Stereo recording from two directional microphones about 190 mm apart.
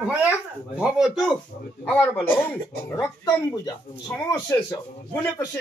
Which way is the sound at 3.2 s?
20° left (ahead or behind).